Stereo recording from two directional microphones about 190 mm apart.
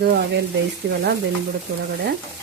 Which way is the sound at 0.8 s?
65° right (ahead or behind).